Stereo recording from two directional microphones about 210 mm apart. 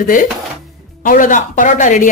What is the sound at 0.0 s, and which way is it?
Speech, 40° left (ahead or behind).